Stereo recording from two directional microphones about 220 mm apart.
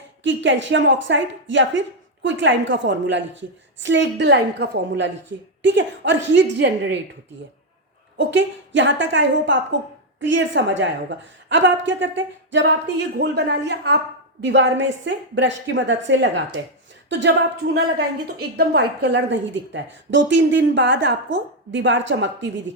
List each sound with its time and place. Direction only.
0.2 s a woman's voice: 55° right (ahead or behind)
8.2 s a woman's voice: 55° right (ahead or behind)